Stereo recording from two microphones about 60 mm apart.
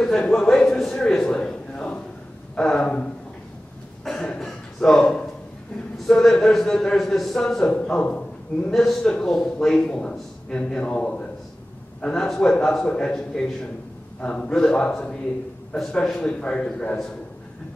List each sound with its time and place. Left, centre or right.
0.0 s a sound: centre
7.7 s a man's voice: centre
8.7 s a man's voice: centre